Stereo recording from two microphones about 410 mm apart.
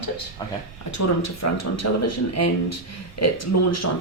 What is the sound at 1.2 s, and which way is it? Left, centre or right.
Speech, left.